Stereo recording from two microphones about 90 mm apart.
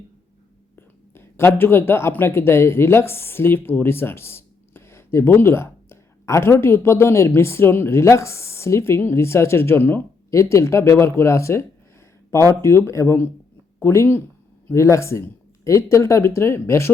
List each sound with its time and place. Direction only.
0.8 s a woman's voice: 25° left (ahead or behind)